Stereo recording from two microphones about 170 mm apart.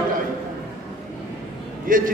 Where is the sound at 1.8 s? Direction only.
55° right (ahead or behind).